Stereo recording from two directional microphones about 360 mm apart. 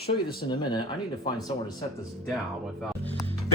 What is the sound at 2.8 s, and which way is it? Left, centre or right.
Speech, centre.